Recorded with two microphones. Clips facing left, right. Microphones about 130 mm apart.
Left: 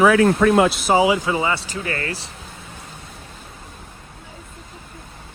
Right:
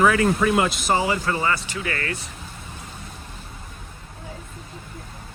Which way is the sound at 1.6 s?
30° left (ahead or behind).